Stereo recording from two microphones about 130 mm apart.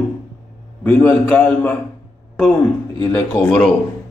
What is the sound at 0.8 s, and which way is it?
Speech, 15° left (ahead or behind).